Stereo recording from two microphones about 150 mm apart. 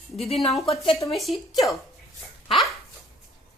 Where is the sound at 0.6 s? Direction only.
40° left (ahead or behind).